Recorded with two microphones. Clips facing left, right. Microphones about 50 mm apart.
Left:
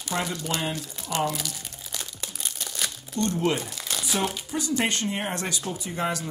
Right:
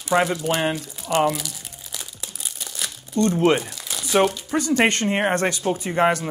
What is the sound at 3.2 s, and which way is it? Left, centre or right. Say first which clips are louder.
Speech: right 7 dB; right.